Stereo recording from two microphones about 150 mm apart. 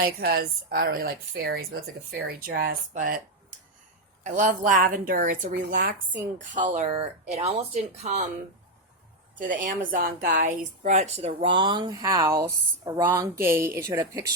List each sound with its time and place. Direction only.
0.0 s a woman's voice: 90° right
2.9 s a woman's voice: 65° right (ahead or behind)
4.2 s a woman's voice: 60° right (ahead or behind)
6.9 s speech: 40° right (ahead or behind)
9.4 s a woman's voice: 60° right (ahead or behind); by 14.3 s 25° right (ahead or behind)